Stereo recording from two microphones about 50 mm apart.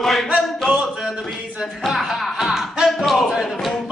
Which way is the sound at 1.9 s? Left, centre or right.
Centre.